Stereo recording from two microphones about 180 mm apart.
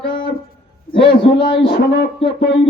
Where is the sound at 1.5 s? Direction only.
70° left (ahead or behind).